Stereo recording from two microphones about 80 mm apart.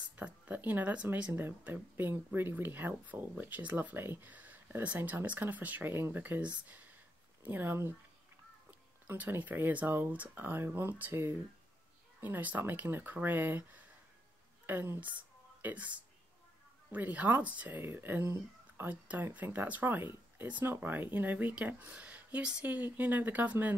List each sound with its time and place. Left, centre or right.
0.1 s speech: right
16.9 s speech: right
18.2 s speech: right
18.9 s speech: right